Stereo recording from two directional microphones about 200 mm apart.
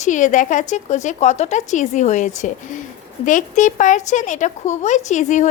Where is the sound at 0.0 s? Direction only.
40° left (ahead or behind).